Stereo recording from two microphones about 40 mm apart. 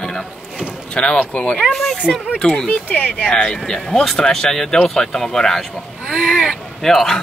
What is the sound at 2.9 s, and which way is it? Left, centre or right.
Speech, left.